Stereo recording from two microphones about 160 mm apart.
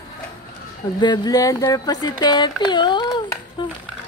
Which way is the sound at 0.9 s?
25° left (ahead or behind).